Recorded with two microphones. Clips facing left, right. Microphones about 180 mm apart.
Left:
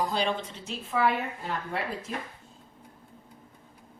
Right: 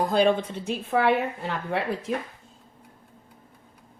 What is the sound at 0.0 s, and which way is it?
A woman's voice, 50° right (ahead or behind).